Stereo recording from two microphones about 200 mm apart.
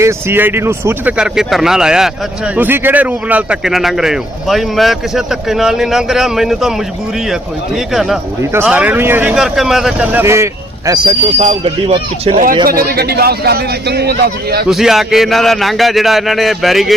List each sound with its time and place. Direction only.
0.0 s speech: 10° right (ahead or behind)
7.9 s speech: centre (ahead or behind); by 12.4 s 30° right (ahead or behind)
12.6 s a man's voice: 50° right (ahead or behind)
14.7 s speech: centre (ahead or behind)